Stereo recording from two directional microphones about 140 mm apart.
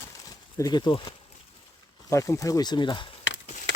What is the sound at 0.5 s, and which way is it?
Speech, 30° left (ahead or behind).